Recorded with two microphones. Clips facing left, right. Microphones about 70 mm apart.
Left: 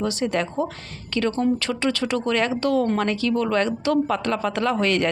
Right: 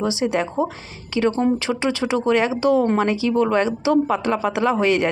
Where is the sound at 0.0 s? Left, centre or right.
Centre.